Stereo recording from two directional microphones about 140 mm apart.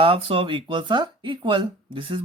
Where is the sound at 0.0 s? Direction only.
40° right (ahead or behind).